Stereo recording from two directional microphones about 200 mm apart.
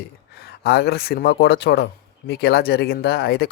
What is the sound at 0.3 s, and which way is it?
Speech, 55° left (ahead or behind).